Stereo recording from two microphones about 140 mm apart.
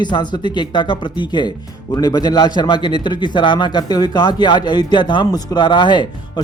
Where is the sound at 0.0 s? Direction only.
30° left (ahead or behind).